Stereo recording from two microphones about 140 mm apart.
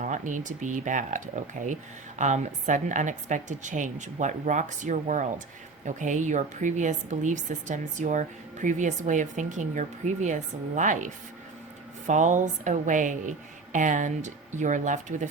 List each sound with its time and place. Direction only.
0.0 s a woman's voice: 65° right (ahead or behind)